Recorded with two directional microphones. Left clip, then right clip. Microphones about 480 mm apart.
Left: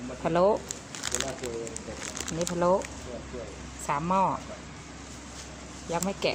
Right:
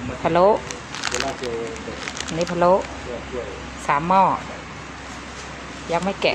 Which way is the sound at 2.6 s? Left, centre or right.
Right.